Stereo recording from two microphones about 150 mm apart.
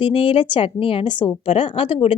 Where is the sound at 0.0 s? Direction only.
35° left (ahead or behind).